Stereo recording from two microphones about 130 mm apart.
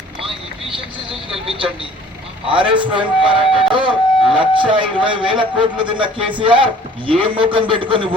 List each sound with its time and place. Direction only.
2.5 s speech: 40° right (ahead or behind)